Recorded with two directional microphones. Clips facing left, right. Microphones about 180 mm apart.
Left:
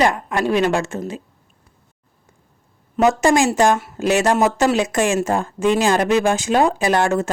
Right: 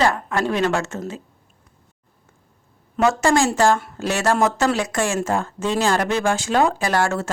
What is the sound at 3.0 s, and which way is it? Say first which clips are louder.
A woman's voice: left 2 dB; 20° left (ahead or behind).